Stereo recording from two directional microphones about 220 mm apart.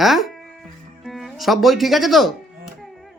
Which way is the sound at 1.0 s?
Centre (ahead or behind).